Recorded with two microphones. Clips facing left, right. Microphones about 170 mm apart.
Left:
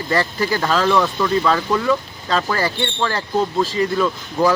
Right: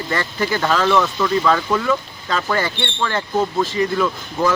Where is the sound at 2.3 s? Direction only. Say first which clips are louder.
Left 1 dB; 35° left (ahead or behind).